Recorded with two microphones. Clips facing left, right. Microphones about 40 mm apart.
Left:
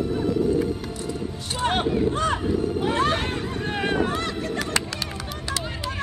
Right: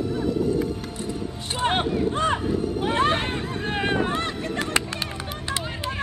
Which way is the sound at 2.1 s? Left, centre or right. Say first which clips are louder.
Even; right.